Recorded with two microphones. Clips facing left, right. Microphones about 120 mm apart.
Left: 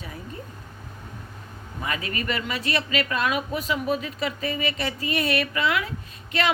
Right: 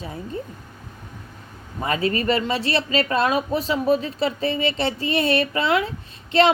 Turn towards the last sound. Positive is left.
turn(degrees=-30)  # may be behind; listen again after turning